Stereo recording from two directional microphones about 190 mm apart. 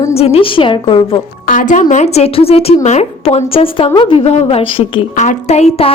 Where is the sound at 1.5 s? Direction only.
45° left (ahead or behind).